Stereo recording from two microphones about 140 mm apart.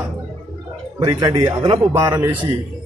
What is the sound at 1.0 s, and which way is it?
Speech, 30° right (ahead or behind).